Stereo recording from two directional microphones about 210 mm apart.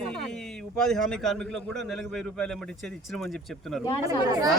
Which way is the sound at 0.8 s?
Centre (ahead or behind).